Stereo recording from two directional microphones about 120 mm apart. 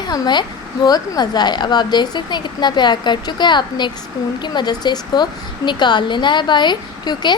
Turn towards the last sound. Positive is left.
turn(degrees=40)  # may be behind; listen again after turning